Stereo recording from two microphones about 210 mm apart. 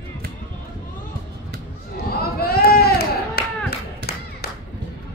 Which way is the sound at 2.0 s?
50° left (ahead or behind).